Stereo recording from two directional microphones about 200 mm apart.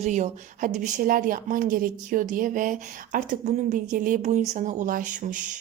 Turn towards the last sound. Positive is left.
turn(degrees=-40)  # may be behind; listen again after turning